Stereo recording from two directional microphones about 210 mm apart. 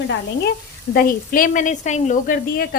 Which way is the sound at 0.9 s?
45° left (ahead or behind).